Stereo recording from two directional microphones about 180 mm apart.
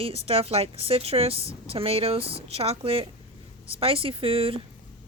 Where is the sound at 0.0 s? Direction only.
35° right (ahead or behind).